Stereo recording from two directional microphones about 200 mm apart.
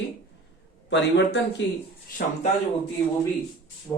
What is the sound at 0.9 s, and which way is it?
Speech, 60° left (ahead or behind).